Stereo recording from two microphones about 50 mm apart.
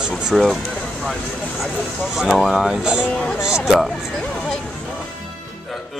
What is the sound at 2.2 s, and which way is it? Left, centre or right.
Speech, centre.